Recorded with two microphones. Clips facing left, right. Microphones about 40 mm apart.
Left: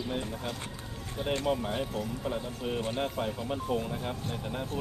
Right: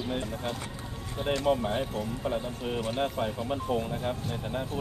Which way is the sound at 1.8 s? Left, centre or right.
Centre.